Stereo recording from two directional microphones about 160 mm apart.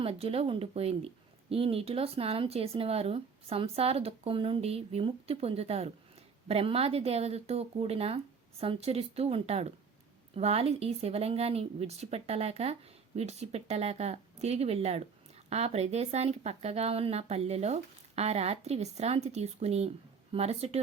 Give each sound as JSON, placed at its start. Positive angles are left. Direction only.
{"t": 0.0, "sound": "speech", "side_deg": -40}